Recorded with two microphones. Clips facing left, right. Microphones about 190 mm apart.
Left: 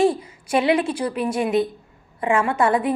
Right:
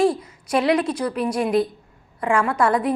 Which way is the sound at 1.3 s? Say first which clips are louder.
Even; 5° left (ahead or behind).